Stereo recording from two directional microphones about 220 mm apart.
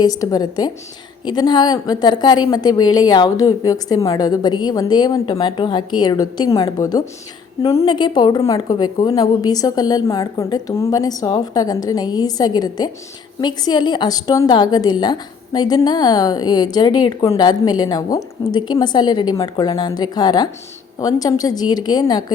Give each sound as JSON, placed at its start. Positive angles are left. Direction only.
{"t": 0.0, "sound": "a woman's voice", "side_deg": 15}